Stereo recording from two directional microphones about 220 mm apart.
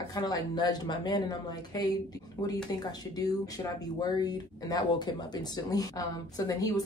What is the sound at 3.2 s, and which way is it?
Speech, 15° left (ahead or behind).